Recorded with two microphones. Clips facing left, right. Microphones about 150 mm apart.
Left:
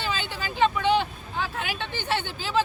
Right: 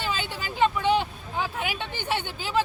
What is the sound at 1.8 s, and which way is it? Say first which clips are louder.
Speech: left 1 dB; 10° right (ahead or behind).